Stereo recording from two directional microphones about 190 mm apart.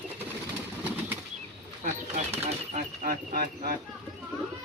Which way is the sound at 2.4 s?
35° right (ahead or behind).